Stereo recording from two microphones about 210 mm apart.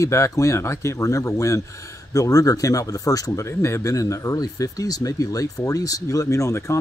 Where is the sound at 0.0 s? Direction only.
15° left (ahead or behind).